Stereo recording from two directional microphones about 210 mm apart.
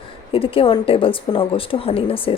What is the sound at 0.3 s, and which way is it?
A woman's voice, 25° left (ahead or behind).